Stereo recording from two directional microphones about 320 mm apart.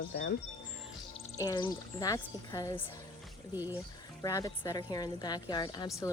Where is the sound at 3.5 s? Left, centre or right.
Centre.